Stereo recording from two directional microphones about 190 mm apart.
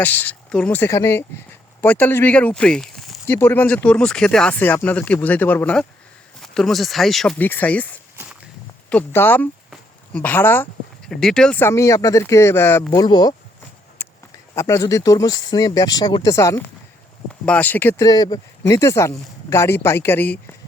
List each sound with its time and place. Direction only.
0.0 s speech: 10° left (ahead or behind)
3.2 s speech: 10° left (ahead or behind)
14.0 s a sound: 10° left (ahead or behind)
14.5 s speech: 15° left (ahead or behind)